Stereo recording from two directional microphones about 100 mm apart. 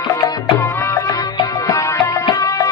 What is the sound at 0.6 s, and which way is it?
Music, 25° left (ahead or behind).